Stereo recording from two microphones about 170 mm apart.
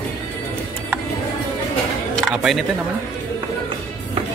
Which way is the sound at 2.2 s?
Centre (ahead or behind).